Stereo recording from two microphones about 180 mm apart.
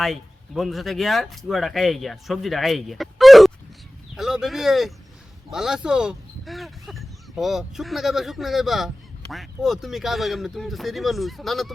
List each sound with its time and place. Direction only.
0.0 s speech: centre (ahead or behind)